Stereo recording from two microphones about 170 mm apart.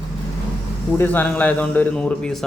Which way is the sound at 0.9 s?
10° left (ahead or behind).